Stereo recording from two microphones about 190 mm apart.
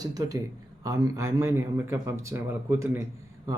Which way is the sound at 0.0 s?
20° right (ahead or behind).